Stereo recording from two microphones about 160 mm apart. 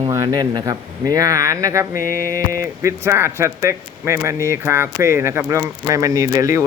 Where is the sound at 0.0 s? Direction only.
20° right (ahead or behind).